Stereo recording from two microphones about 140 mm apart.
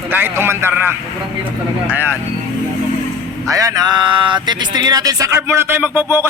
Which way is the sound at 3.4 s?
25° right (ahead or behind).